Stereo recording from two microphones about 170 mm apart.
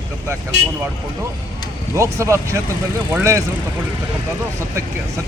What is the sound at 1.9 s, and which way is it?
Speech, 15° right (ahead or behind).